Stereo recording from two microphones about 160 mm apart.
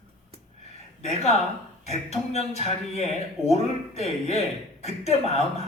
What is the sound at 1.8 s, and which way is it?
Speech, 45° left (ahead or behind).